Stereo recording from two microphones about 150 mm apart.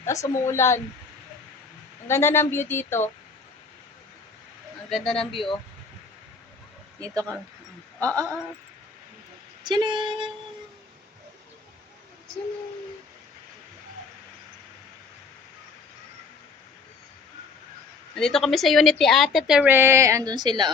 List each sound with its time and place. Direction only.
0.0 s a woman's voice: 20° left (ahead or behind)
2.0 s a woman's voice: 15° left (ahead or behind)
4.9 s a woman's voice: centre (ahead or behind)
5.3 s speech: 35° left (ahead or behind)
7.0 s speech: 25° right (ahead or behind)
7.9 s a woman's voice: 10° left (ahead or behind)
9.6 s speech: 30° right (ahead or behind)
18.1 s a woman's voice: 5° left (ahead or behind); by 20.7 s 30° right (ahead or behind)